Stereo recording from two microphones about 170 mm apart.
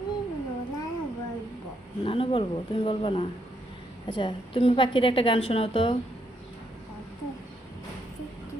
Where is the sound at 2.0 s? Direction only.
35° left (ahead or behind).